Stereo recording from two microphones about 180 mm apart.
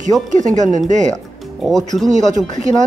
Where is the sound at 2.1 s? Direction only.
40° right (ahead or behind).